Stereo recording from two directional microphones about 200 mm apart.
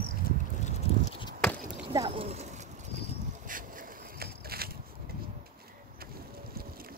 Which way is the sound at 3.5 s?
45° right (ahead or behind).